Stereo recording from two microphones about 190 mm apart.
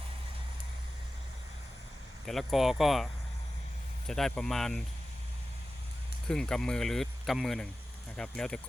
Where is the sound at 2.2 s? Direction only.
Centre (ahead or behind).